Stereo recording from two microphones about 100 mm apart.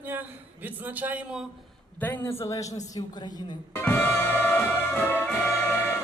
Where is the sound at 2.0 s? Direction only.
25° left (ahead or behind).